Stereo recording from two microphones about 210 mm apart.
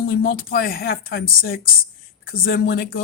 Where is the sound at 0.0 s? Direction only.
45° left (ahead or behind).